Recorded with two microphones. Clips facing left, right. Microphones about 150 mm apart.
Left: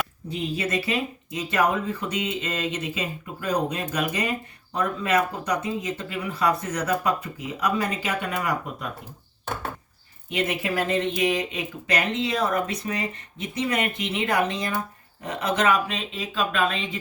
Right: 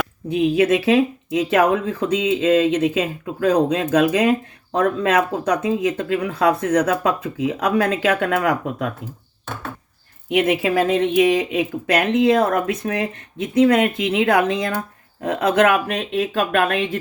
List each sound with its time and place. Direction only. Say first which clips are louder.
0.3 s speech: right 11 dB; 90° right
10.2 s speech: right 8 dB; 80° right; by 17.0 s 65° right (ahead or behind)